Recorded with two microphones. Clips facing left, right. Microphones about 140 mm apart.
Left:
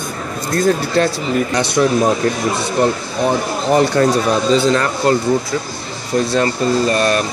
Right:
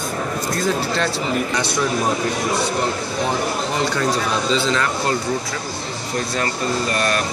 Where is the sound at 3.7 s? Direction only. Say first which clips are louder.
Left 11 dB; 55° left (ahead or behind).